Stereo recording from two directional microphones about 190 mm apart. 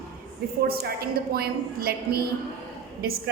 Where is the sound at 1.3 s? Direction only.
55° right (ahead or behind).